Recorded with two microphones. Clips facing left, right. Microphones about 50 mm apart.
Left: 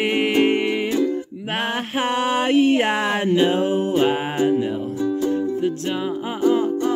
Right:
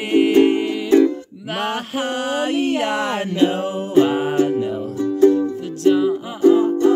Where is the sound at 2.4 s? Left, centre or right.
Left.